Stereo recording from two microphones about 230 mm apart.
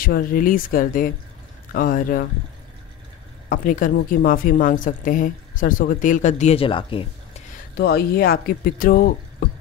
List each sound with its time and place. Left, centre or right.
0.0 s speech: left
3.4 s speech: left
7.7 s speech: left